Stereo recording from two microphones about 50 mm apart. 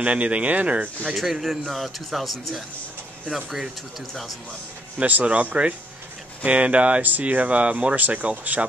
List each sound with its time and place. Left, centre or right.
0.0 s speech: right
1.1 s speech: centre
4.9 s speech: right
7.0 s speech: right